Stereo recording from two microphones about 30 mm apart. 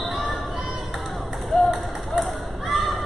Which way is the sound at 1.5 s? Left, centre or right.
Centre.